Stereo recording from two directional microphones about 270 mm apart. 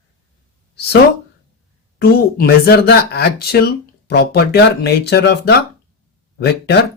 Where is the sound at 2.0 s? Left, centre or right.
Left.